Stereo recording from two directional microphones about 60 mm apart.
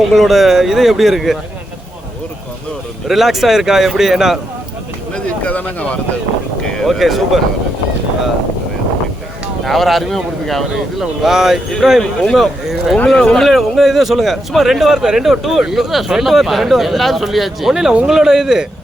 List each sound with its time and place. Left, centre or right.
0.1 s speech: centre
3.1 s speech: centre
5.1 s speech: left
6.6 s speech: centre
9.6 s speech: centre
13.1 s speech: centre
13.4 s speech: centre